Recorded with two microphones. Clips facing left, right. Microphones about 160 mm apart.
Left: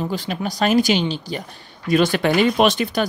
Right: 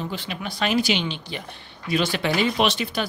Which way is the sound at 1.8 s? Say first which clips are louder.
Left 6 dB; 50° left (ahead or behind).